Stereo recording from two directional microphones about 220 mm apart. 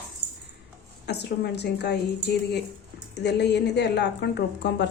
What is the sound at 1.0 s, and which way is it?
Speech, 50° left (ahead or behind).